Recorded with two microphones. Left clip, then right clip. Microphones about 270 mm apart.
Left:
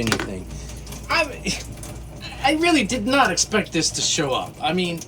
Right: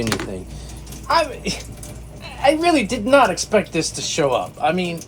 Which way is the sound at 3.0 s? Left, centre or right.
Centre.